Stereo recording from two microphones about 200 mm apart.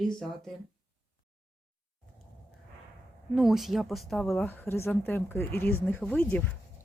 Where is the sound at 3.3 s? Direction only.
Centre (ahead or behind).